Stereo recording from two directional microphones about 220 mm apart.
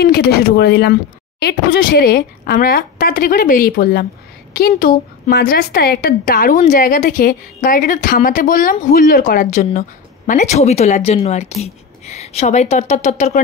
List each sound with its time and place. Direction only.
0.0 s a woman's voice: 45° left (ahead or behind)